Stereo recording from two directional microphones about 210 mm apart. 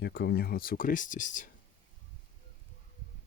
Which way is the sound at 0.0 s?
50° left (ahead or behind).